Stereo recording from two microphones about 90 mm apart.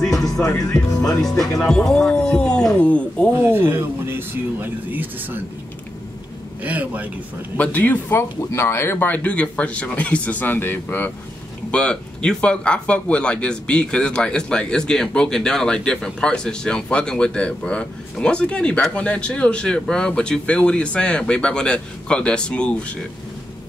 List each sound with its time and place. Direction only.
0.2 s music: 40° left (ahead or behind)
1.2 s music: 5° left (ahead or behind)
1.6 s speech: 5° left (ahead or behind)
3.3 s speech: 25° right (ahead or behind)
6.6 s speech: 15° right (ahead or behind)
7.5 s speech: 15° left (ahead or behind)
11.7 s speech: 10° left (ahead or behind)